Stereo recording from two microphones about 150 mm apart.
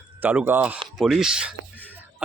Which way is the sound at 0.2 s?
10° right (ahead or behind).